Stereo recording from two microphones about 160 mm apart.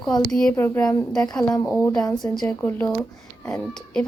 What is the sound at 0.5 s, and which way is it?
Speech, 15° left (ahead or behind).